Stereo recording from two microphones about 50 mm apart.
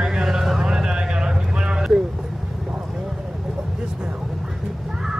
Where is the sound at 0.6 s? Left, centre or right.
Centre.